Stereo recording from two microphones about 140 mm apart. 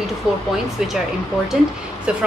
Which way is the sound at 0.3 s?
5° right (ahead or behind).